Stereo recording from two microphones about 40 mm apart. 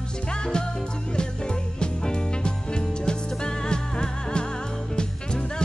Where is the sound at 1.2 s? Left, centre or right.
Left.